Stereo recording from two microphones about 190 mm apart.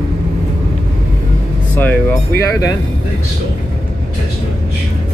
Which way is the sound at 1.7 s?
10° left (ahead or behind).